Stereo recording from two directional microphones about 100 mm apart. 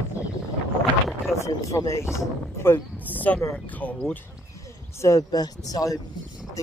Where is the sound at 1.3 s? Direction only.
30° left (ahead or behind).